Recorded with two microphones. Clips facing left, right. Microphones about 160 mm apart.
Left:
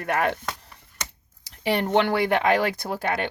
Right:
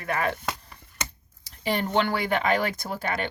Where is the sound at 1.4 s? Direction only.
65° left (ahead or behind).